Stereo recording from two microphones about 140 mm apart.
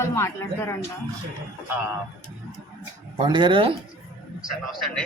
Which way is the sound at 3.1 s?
35° right (ahead or behind).